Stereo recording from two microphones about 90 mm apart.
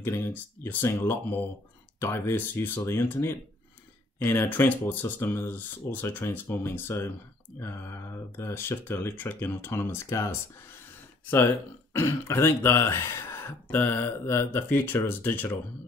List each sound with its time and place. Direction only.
0.0 s speech: 25° left (ahead or behind)
11.9 s speech: 30° left (ahead or behind)